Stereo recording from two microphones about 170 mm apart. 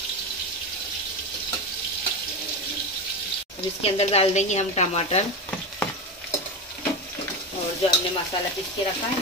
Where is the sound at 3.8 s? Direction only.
35° left (ahead or behind).